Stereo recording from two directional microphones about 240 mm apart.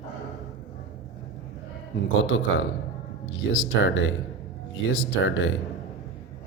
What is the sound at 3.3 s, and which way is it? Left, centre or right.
Speech, left.